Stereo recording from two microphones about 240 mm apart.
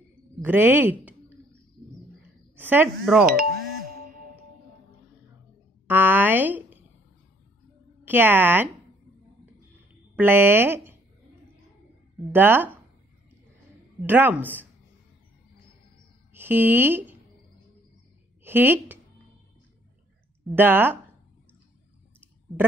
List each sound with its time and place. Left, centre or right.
0.4 s a woman's voice: centre
2.5 s a woman's voice: centre
3.3 s doorbell: right
5.9 s a sound: centre
8.0 s speech: centre
10.1 s speech: centre
12.3 s a woman's voice: centre
14.0 s a woman's voice: centre
16.3 s speech: centre
18.4 s a woman's voice: centre
20.5 s a woman's voice: centre